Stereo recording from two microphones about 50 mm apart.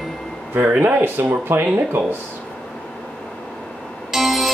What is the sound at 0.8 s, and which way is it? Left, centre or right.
Speech, right.